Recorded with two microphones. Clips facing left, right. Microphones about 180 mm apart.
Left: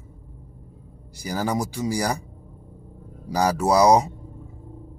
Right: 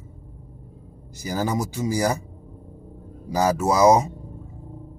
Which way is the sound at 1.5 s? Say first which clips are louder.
Even; 15° left (ahead or behind).